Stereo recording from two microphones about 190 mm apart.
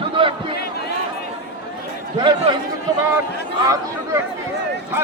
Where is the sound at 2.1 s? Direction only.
25° right (ahead or behind).